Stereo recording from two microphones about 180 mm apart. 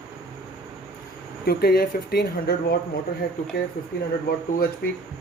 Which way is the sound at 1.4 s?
60° left (ahead or behind).